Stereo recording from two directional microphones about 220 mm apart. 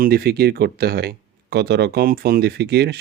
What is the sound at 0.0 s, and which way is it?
Speech, 45° right (ahead or behind).